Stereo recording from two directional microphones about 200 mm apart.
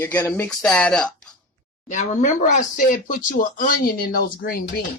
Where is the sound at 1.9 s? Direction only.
35° left (ahead or behind).